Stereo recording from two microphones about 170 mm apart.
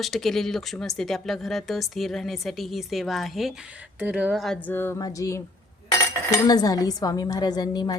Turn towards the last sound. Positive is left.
turn(degrees=25)  # may be behind; listen again after turning